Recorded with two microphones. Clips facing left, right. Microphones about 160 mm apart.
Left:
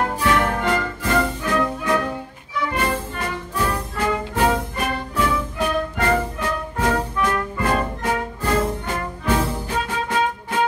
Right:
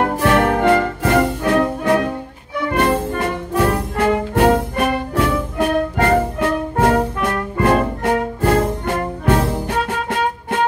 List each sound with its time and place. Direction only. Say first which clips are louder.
0.0 s music: right 5 dB; 55° right (ahead or behind)